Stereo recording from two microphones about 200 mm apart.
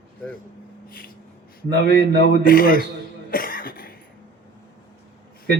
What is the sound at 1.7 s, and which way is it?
Speech, 55° right (ahead or behind).